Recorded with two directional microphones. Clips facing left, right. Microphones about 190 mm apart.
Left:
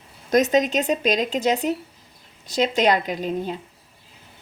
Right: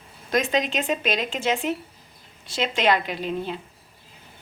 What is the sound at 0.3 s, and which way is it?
A woman's voice, 45° left (ahead or behind).